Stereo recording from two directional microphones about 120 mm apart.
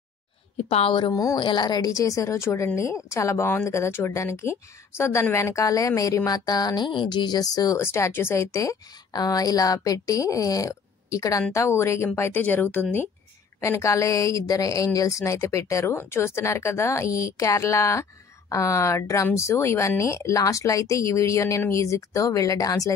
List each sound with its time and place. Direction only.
0.7 s a woman's voice: 55° left (ahead or behind)
0.9 s a woman's voice: 40° left (ahead or behind)
7.8 s a woman's voice: 20° left (ahead or behind)